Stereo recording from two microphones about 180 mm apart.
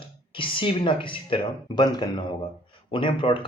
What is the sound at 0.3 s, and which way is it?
Speech, 30° left (ahead or behind).